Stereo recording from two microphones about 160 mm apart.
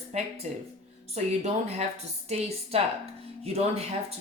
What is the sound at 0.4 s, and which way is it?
A woman's voice, 45° right (ahead or behind).